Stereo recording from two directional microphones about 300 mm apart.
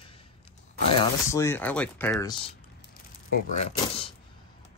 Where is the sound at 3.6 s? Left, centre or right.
Centre.